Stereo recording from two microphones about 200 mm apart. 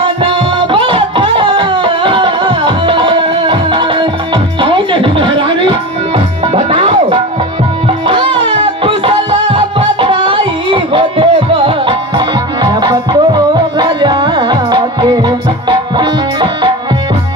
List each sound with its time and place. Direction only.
0.0 s music: 25° right (ahead or behind)